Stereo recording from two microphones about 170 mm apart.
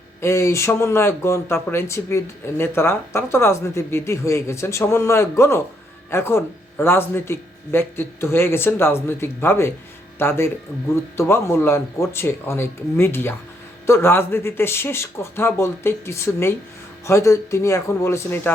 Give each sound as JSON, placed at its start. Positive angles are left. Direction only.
{"t": 0.2, "sound": "speech", "side_deg": 15}